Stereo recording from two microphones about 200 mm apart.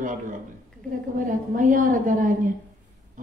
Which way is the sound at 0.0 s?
40° right (ahead or behind).